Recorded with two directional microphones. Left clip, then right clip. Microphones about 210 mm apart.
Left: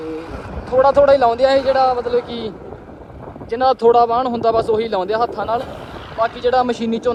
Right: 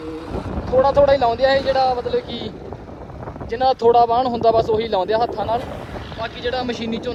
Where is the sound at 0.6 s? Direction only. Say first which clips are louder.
Left 2 dB; 20° left (ahead or behind).